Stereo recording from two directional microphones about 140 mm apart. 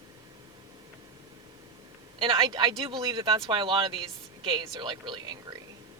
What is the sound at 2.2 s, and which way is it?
Speech, 35° right (ahead or behind).